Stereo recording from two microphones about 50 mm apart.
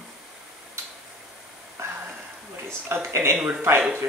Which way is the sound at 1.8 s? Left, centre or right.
Right.